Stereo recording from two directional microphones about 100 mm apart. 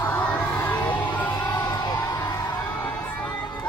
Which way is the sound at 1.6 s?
40° left (ahead or behind).